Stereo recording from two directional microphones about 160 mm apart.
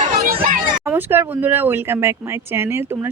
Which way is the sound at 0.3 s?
60° right (ahead or behind).